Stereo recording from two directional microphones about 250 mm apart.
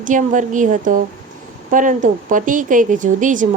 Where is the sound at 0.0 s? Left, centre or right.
Right.